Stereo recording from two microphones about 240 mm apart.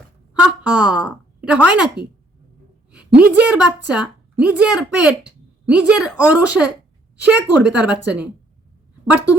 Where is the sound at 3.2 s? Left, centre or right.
Centre.